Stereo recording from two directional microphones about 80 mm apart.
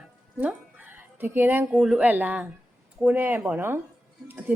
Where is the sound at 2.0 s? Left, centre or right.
Right.